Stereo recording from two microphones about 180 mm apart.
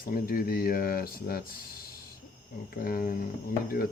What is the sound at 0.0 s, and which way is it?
Speech, 55° left (ahead or behind).